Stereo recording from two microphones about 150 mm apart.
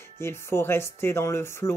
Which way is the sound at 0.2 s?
15° left (ahead or behind).